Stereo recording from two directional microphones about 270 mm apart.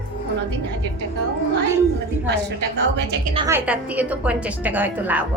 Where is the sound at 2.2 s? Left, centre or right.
Right.